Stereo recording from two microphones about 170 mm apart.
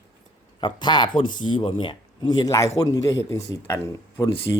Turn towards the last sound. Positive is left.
turn(degrees=15)  # may be behind; listen again after turning